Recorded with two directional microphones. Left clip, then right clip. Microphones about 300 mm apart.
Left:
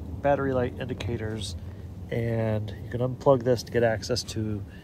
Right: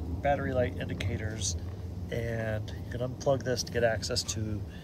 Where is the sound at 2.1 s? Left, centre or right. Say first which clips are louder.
Left 5 dB; left.